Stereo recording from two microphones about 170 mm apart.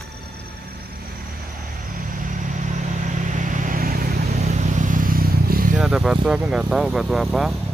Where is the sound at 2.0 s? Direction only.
50° right (ahead or behind).